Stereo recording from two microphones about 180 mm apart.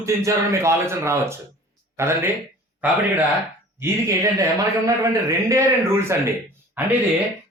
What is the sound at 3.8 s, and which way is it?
A man's voice, 15° right (ahead or behind).